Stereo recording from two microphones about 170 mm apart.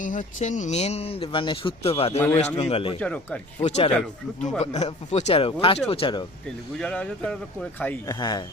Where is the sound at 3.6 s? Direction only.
40° left (ahead or behind).